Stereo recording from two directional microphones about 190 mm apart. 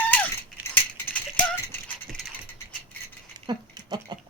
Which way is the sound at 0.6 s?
10° left (ahead or behind).